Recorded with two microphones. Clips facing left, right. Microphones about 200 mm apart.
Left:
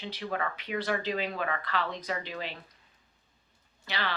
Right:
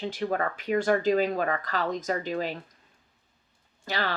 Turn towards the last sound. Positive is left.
turn(degrees=-45)  # may be behind; listen again after turning